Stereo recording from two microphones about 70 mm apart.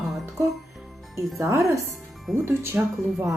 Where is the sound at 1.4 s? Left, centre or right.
Right.